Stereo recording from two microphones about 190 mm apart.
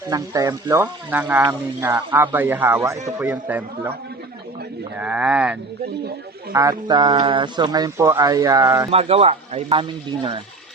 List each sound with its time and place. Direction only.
0.1 s speech: 20° right (ahead or behind)
4.9 s speech: 5° right (ahead or behind)
6.5 s speech: 15° right (ahead or behind)
8.9 s speech: 30° right (ahead or behind)